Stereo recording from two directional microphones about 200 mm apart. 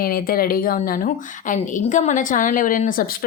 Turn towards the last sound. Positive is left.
turn(degrees=45)  # may be behind; listen again after turning